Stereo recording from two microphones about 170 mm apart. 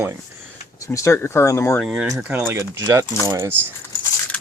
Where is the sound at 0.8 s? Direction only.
15° left (ahead or behind).